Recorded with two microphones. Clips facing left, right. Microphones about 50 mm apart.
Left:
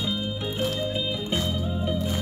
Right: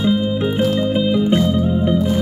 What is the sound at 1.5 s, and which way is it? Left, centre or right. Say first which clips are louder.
Music: right 11 dB; right.